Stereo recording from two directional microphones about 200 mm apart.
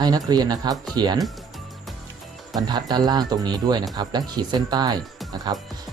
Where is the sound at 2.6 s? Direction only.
20° right (ahead or behind).